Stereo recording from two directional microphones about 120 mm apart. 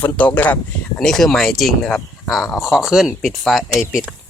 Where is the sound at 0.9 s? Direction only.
5° left (ahead or behind).